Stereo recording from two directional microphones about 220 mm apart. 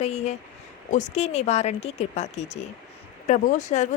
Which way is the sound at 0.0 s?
30° left (ahead or behind).